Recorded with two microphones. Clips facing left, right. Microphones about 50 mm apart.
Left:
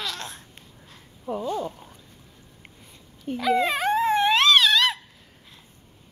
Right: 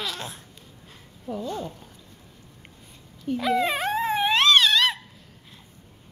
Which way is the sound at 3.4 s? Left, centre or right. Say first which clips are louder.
Left 2 dB; centre.